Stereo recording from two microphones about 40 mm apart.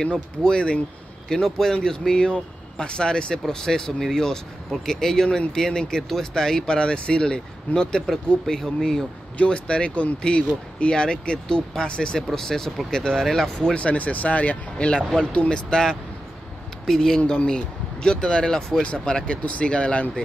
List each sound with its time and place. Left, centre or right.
0.0 s speech: left
9.4 s speech: left
13.7 s speech: left; by 18.8 s centre
18.8 s speech: left